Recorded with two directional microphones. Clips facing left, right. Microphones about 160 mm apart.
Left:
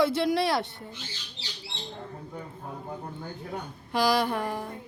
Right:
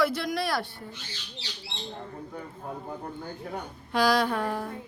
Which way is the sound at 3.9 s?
10° left (ahead or behind).